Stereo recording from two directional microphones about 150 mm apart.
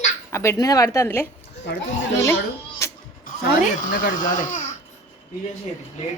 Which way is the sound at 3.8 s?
65° left (ahead or behind).